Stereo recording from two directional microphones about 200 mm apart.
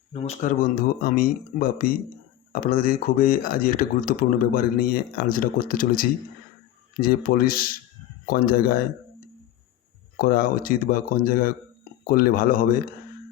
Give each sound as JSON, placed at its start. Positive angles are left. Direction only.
{"t": 0.1, "sound": "speech", "side_deg": 30}
{"t": 10.2, "sound": "speech", "side_deg": 45}